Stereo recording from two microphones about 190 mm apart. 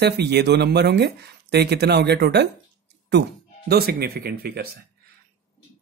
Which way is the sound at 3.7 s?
55° right (ahead or behind).